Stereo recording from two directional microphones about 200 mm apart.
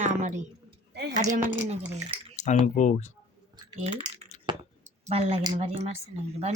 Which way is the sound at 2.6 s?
35° left (ahead or behind).